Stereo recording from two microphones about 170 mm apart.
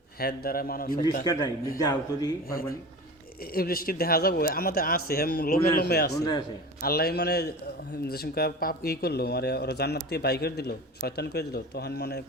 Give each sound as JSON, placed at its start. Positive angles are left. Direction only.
{"t": 0.2, "sound": "speech", "side_deg": 60}
{"t": 1.2, "sound": "speech", "side_deg": 20}
{"t": 2.5, "sound": "speech", "side_deg": 60}